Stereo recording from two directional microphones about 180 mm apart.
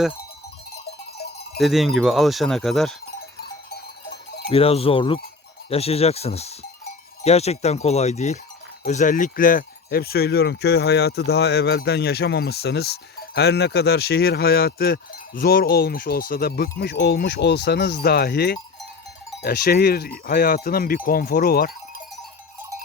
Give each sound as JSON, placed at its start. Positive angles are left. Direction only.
{"t": 1.5, "sound": "speech", "side_deg": 0}
{"t": 4.4, "sound": "speech", "side_deg": 35}